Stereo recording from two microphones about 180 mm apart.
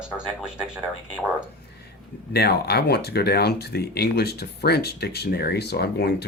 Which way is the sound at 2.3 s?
65° left (ahead or behind).